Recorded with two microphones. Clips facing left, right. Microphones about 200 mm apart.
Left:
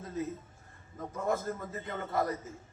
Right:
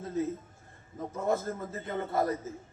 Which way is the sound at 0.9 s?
25° right (ahead or behind).